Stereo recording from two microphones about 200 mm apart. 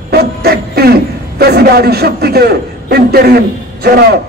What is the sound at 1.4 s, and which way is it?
A man's voice, 50° right (ahead or behind).